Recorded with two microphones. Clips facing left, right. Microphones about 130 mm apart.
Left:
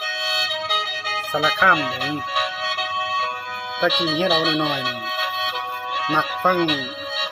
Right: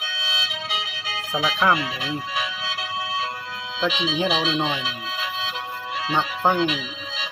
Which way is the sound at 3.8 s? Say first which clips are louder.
Left 3 dB; 55° left (ahead or behind).